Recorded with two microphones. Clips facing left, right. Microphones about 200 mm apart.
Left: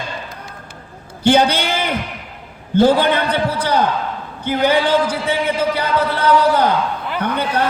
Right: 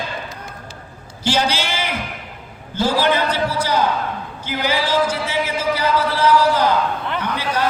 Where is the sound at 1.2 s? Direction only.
60° left (ahead or behind).